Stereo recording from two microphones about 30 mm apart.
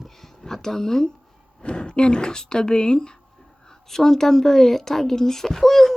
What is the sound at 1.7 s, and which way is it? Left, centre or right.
Speech, left.